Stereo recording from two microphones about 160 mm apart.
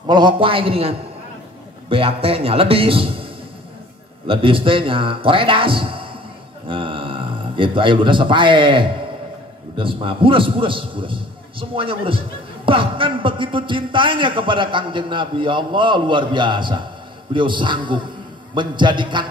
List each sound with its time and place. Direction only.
0.0 s a man's voice: 30° right (ahead or behind)
4.3 s a man's voice: 35° right (ahead or behind)